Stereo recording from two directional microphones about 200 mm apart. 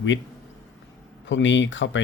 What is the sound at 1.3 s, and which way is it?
Speech, 70° left (ahead or behind).